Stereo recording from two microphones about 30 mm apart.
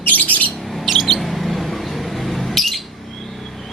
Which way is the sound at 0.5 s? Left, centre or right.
Centre.